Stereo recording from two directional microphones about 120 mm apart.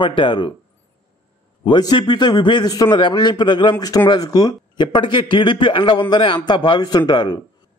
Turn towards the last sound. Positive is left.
turn(degrees=35)  # may be behind; listen again after turning